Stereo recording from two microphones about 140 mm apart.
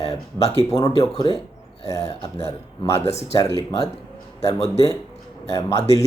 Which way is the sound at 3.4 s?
25° left (ahead or behind).